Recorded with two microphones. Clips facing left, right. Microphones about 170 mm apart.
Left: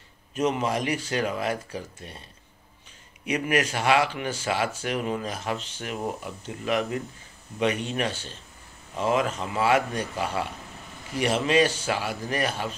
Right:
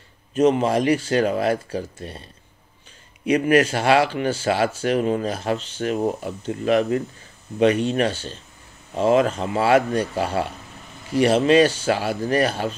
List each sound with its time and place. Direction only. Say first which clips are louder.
0.3 s speech: right 8 dB; 30° right (ahead or behind)
3.3 s speech: right 8 dB; 30° right (ahead or behind)